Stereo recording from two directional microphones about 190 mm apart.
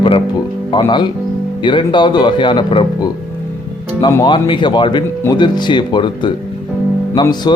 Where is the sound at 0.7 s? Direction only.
25° left (ahead or behind).